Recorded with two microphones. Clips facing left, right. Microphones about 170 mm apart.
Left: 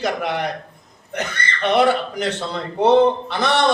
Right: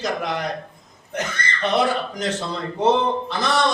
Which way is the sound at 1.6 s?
65° left (ahead or behind).